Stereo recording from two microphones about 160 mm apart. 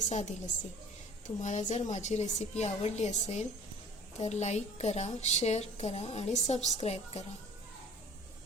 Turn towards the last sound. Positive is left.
turn(degrees=40)  # may be behind; listen again after turning